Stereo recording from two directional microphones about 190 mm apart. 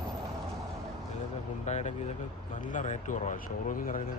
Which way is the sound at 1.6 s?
35° left (ahead or behind).